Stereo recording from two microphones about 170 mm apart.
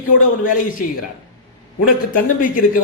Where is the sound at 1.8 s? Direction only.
55° left (ahead or behind).